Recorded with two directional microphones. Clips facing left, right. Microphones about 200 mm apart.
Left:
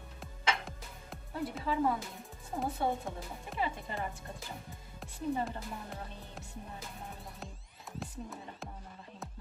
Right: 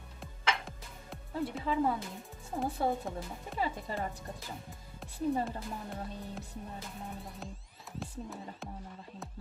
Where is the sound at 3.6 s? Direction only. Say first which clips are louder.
Right 1 dB; 35° right (ahead or behind).